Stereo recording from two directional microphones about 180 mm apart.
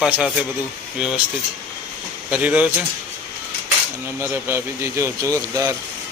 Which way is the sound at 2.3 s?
5° right (ahead or behind).